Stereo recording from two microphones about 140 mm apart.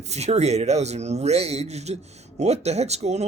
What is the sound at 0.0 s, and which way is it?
Speech, 50° right (ahead or behind).